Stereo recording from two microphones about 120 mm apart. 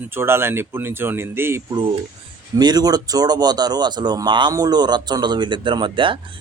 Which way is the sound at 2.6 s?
35° right (ahead or behind).